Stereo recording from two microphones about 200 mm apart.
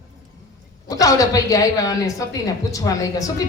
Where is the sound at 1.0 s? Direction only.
15° left (ahead or behind).